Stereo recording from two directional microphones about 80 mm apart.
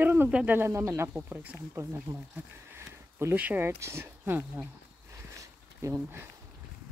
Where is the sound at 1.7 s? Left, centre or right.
Right.